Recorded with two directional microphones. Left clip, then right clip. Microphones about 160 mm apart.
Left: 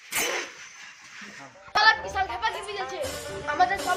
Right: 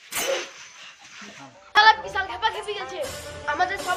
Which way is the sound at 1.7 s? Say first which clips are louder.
Right 4 dB; 40° right (ahead or behind).